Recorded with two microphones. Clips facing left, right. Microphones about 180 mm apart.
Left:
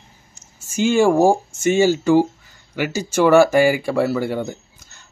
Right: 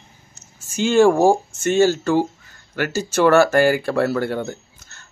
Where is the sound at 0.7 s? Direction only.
10° left (ahead or behind).